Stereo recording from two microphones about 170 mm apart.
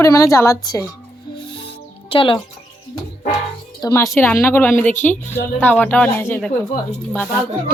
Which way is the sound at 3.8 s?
20° left (ahead or behind).